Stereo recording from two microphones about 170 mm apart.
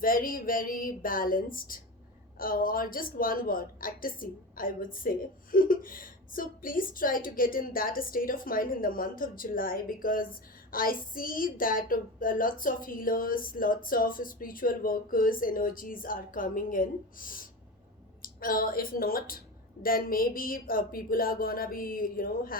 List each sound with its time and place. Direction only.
0.0 s a woman's voice: 55° left (ahead or behind)
10.7 s a sound: 55° left (ahead or behind)
11.1 s a woman's voice: 55° left (ahead or behind)